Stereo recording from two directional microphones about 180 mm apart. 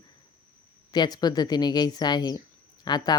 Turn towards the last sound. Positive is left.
turn(degrees=25)  # may be behind; listen again after turning